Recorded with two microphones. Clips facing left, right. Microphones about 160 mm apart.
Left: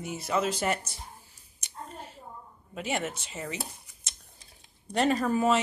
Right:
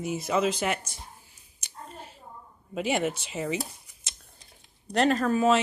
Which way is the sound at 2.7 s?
15° right (ahead or behind).